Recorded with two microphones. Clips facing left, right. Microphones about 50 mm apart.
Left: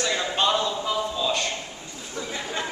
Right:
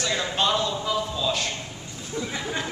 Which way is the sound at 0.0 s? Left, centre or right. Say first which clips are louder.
Left 1 dB; centre.